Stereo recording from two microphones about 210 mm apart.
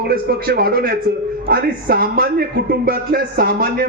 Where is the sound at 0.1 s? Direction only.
45° right (ahead or behind).